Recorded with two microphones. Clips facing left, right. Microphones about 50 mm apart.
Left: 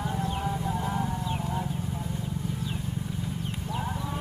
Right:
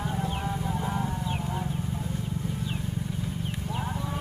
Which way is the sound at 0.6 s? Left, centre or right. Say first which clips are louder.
Left 1 dB; centre.